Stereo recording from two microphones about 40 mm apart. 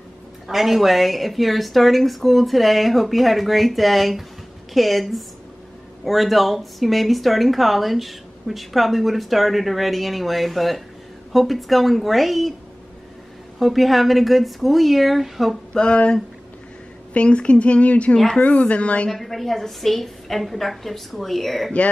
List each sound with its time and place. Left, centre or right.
0.5 s speech: centre
13.6 s speech: centre
15.7 s a sound: left
17.1 s a woman's voice: left
19.0 s speech: centre